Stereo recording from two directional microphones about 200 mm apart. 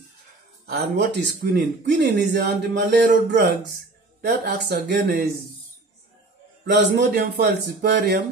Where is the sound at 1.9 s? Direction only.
60° right (ahead or behind).